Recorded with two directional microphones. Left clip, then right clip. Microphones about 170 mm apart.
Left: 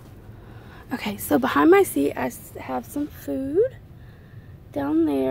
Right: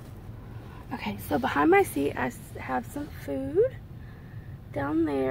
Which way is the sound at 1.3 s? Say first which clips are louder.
Left 5 dB; 30° left (ahead or behind).